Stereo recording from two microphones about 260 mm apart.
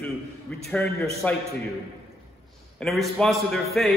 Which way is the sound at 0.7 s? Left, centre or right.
Centre.